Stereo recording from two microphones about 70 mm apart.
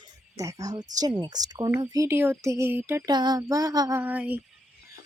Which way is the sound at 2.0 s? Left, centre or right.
Right.